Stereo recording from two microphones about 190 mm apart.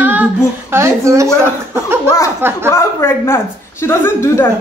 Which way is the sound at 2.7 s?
15° left (ahead or behind).